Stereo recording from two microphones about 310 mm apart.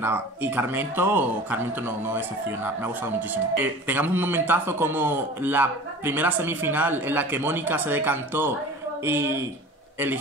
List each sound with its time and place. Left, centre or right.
0.0 s a man's voice: centre